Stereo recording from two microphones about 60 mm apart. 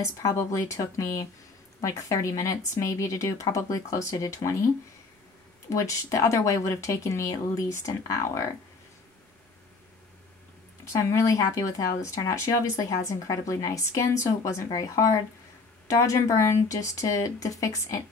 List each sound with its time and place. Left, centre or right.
0.0 s speech: left
5.7 s speech: left
10.9 s speech: left